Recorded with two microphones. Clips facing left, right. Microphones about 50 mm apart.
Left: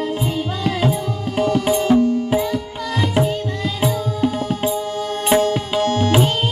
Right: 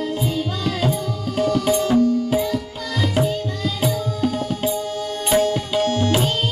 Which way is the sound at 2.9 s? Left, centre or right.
Left.